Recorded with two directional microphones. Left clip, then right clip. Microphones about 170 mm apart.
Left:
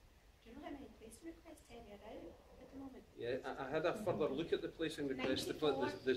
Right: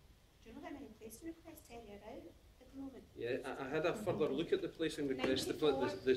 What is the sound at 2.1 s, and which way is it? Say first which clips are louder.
Speech: right 1 dB; 30° right (ahead or behind).